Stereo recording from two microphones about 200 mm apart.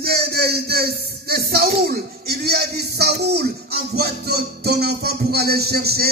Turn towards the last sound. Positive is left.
turn(degrees=-50)  # may be behind; listen again after turning